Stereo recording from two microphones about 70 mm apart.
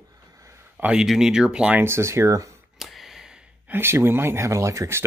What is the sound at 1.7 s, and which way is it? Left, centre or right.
Speech, right.